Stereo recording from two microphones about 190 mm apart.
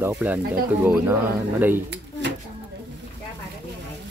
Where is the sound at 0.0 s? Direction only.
10° right (ahead or behind).